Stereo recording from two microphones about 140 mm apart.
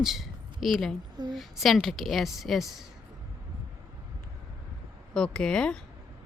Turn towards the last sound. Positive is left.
turn(degrees=5)  # may be behind; listen again after turning